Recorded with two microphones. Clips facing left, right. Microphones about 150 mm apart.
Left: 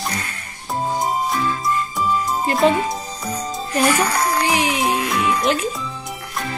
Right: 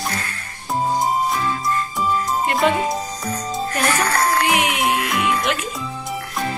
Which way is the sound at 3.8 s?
10° left (ahead or behind).